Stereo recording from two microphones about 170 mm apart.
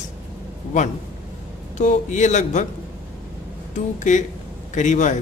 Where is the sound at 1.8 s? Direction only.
45° left (ahead or behind).